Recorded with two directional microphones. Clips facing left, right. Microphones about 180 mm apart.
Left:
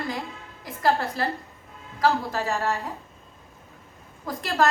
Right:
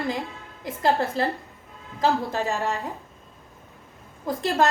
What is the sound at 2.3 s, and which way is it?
Speech, 15° right (ahead or behind).